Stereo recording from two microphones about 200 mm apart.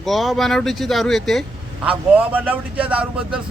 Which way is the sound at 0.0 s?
Centre (ahead or behind).